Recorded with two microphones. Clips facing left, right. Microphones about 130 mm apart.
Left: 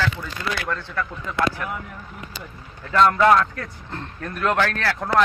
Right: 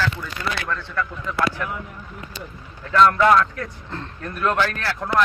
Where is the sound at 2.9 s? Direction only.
30° left (ahead or behind).